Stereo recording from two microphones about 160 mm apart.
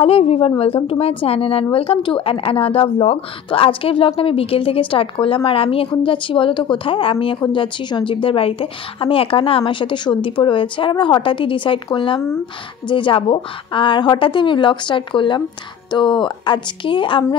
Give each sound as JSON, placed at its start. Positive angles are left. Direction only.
{"t": 0.0, "sound": "speech", "side_deg": 35}